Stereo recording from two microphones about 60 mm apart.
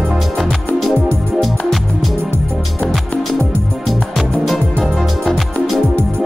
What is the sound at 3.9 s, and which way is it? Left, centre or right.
Music, centre.